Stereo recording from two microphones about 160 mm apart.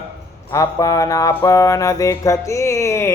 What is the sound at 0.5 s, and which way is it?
Mantra, 20° left (ahead or behind).